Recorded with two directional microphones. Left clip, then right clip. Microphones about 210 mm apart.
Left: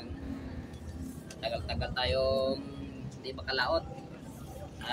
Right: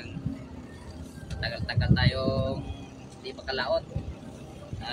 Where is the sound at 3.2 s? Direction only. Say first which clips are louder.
Right 2 dB; 20° left (ahead or behind).